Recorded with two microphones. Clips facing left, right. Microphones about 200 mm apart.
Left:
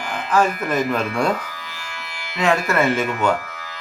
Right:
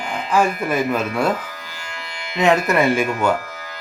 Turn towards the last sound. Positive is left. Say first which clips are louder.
# right 1 dB
turn(degrees=-10)  # may be behind; listen again after turning